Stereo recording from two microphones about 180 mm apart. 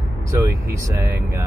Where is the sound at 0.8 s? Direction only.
15° right (ahead or behind).